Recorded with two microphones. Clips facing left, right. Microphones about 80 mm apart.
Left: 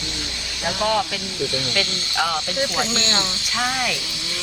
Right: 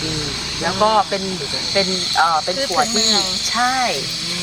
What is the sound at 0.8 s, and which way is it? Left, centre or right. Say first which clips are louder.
Speech: right 7 dB; right.